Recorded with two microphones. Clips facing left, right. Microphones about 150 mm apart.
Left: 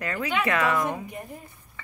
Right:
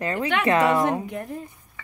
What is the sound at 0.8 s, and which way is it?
Speech, 85° right.